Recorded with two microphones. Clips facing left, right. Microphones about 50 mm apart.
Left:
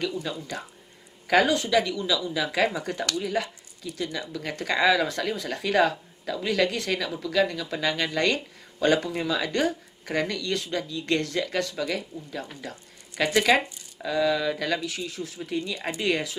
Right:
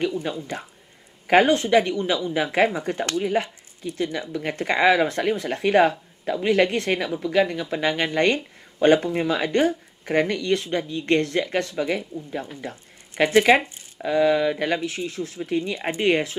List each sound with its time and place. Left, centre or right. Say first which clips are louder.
0.0 s speech: right 5 dB; right